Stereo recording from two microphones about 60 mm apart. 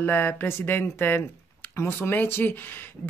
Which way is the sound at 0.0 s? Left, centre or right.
Left.